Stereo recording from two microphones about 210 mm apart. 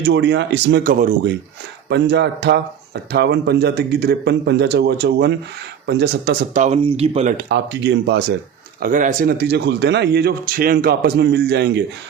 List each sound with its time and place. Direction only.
0.0 s speech: 55° right (ahead or behind)
6.5 s speech: 35° right (ahead or behind)
7.4 s speech: 55° right (ahead or behind)
8.8 s speech: 40° right (ahead or behind)